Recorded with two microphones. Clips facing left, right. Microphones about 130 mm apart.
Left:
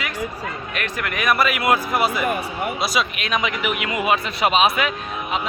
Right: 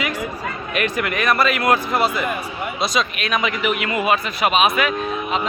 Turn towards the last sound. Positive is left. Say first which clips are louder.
# right 1 dB
turn(degrees=25)  # may be behind; listen again after turning